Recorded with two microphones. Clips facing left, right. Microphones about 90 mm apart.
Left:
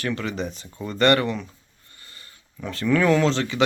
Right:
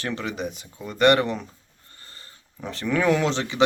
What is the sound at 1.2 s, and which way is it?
Speech, 35° right (ahead or behind).